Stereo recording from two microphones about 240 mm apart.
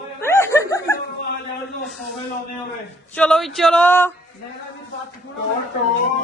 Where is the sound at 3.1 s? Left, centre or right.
Centre.